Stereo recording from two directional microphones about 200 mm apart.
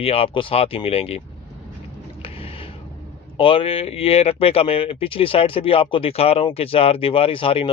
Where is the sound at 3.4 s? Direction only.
25° left (ahead or behind).